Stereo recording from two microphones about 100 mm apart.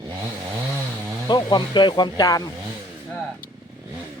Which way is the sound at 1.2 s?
45° left (ahead or behind).